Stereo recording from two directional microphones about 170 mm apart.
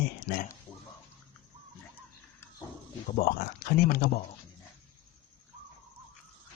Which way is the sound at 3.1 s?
60° left (ahead or behind).